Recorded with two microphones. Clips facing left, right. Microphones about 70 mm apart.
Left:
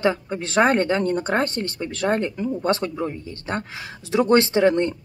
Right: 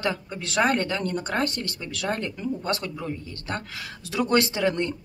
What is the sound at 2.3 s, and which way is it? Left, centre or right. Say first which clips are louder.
Speech: left 6 dB; centre.